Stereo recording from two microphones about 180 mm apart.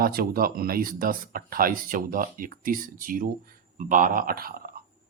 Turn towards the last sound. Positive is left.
turn(degrees=-55)  # may be behind; listen again after turning